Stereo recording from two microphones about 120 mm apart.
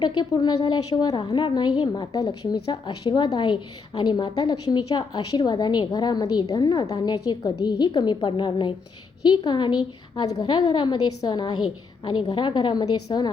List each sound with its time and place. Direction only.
0.0 s a woman's voice: 40° left (ahead or behind)